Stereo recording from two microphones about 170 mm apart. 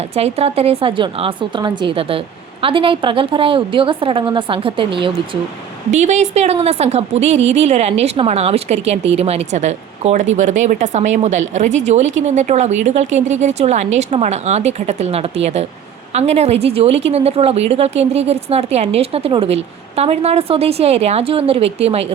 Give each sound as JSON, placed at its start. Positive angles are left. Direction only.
{"t": 0.2, "sound": "a woman's voice", "side_deg": -35}
{"t": 5.9, "sound": "a woman's voice", "side_deg": -45}